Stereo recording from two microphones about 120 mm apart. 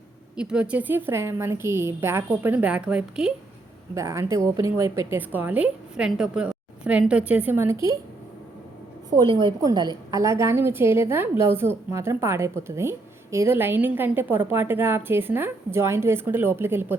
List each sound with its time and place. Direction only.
0.3 s a woman's voice: 5° right (ahead or behind)
3.9 s a woman's voice: 25° right (ahead or behind)
9.3 s a woman's voice: 40° right (ahead or behind)
10.2 s a woman's voice: 25° right (ahead or behind)